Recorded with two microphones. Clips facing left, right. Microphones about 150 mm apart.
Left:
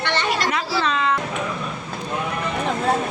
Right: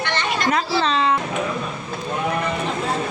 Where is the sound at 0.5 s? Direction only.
30° right (ahead or behind).